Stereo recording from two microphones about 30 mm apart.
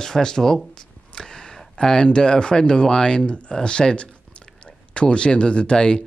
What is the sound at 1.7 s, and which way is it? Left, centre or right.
Speech, left.